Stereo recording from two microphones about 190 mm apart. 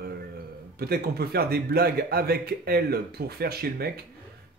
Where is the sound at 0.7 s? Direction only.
55° right (ahead or behind).